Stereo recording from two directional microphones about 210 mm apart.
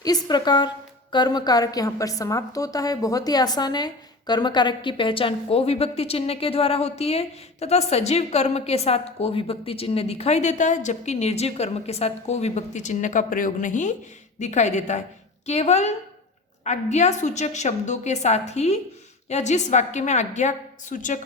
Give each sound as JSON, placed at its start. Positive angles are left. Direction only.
{"t": 0.0, "sound": "a woman's voice", "side_deg": 20}